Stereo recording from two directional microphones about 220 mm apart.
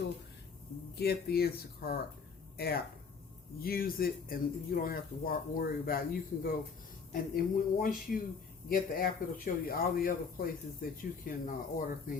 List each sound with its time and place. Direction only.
0.9 s speech: 45° left (ahead or behind)